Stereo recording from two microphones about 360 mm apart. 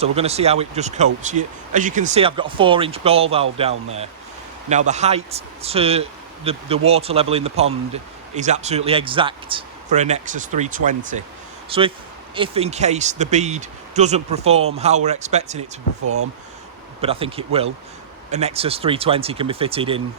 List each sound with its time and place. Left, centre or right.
0.0 s speech: centre
17.0 s speech: centre